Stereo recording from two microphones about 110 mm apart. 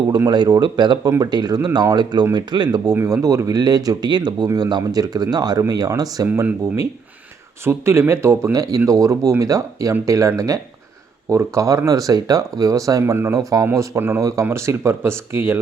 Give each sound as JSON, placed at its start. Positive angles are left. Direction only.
{"t": 0.3, "sound": "speech", "side_deg": -40}
{"t": 3.0, "sound": "speech", "side_deg": -30}
{"t": 6.2, "sound": "speech", "side_deg": -20}